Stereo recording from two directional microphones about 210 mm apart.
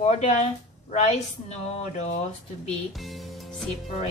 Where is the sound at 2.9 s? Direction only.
Centre (ahead or behind).